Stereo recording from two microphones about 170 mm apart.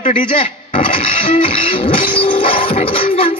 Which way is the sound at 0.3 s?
30° left (ahead or behind).